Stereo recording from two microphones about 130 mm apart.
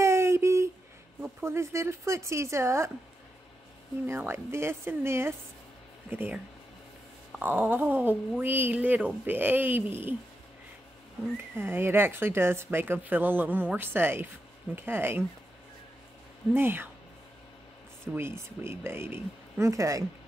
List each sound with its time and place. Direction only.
0.0 s a sound: 20° right (ahead or behind)
1.4 s speech: 20° right (ahead or behind)
4.1 s speech: 20° right (ahead or behind)
11.5 s speech: 15° right (ahead or behind)
16.5 s speech: 15° right (ahead or behind)
18.0 s speech: 20° right (ahead or behind)